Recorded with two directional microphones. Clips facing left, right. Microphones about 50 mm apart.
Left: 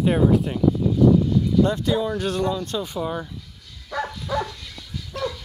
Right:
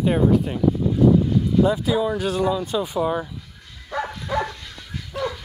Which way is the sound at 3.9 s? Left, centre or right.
Right.